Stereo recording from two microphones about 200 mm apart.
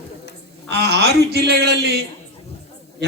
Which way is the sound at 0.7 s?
55° right (ahead or behind).